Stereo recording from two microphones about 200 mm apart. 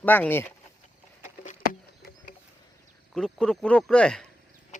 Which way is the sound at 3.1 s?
5° left (ahead or behind).